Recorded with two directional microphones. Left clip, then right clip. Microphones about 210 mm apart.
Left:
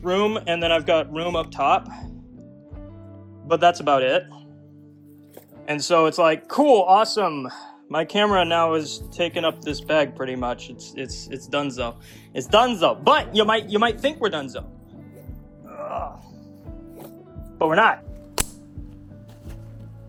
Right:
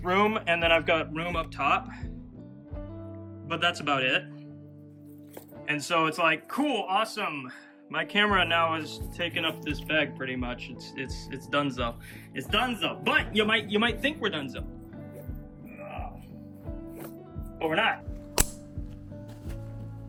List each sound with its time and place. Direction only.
0.0 s speech: 10° left (ahead or behind)
3.4 s speech: 10° left (ahead or behind)
5.6 s speech: 15° left (ahead or behind)
16.6 s music: centre (ahead or behind)
17.6 s speech: 70° left (ahead or behind)